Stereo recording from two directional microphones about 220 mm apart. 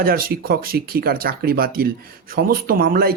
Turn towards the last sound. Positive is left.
turn(degrees=-40)  # may be behind; listen again after turning